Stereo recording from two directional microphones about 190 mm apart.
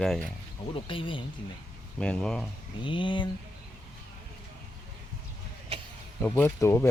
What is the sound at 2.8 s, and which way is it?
Speech, 25° left (ahead or behind).